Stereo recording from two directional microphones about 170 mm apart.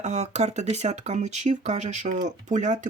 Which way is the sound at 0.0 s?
40° right (ahead or behind).